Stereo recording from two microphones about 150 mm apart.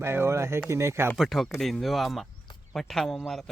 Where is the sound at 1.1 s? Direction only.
Centre (ahead or behind).